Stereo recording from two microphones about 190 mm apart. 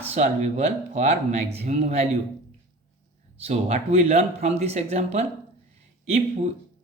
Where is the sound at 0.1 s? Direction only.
35° right (ahead or behind).